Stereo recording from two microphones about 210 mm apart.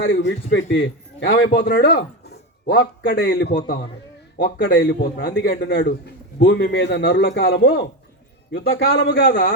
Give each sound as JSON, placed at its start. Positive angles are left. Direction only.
{"t": 0.0, "sound": "a man's voice", "side_deg": 60}
{"t": 1.5, "sound": "a man's voice", "side_deg": 45}